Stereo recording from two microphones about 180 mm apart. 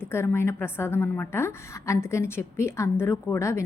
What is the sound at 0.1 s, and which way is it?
A woman's voice, 15° left (ahead or behind).